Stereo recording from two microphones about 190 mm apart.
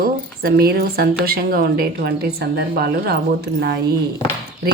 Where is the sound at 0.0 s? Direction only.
50° right (ahead or behind).